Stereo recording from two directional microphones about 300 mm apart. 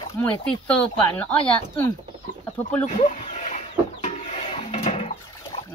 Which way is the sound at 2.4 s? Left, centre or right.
Centre.